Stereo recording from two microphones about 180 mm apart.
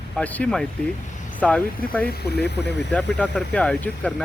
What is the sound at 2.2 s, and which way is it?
Speech, 65° left (ahead or behind).